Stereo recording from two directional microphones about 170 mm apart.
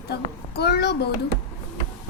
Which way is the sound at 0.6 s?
75° left (ahead or behind).